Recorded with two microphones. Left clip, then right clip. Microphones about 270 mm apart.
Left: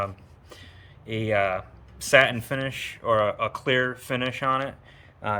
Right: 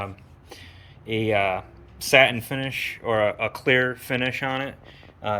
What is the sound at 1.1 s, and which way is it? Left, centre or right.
Speech, centre.